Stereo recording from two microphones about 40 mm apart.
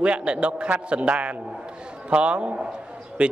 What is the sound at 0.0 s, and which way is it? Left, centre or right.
A man's voice, right.